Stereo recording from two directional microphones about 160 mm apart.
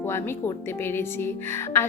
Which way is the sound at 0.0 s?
15° left (ahead or behind).